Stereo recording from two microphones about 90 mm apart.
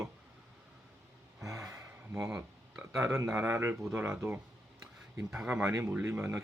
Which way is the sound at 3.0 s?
30° right (ahead or behind).